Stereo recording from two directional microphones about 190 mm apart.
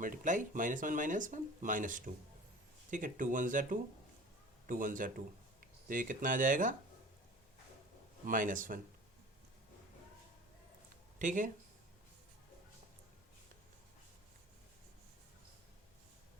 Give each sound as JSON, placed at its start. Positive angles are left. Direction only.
{"t": 0.0, "sound": "speech", "side_deg": -45}
{"t": 8.3, "sound": "speech", "side_deg": -45}
{"t": 11.2, "sound": "speech", "side_deg": -45}